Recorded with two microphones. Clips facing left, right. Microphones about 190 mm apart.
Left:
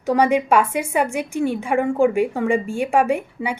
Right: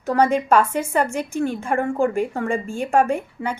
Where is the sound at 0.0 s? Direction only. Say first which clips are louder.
Left 1 dB; 15° left (ahead or behind).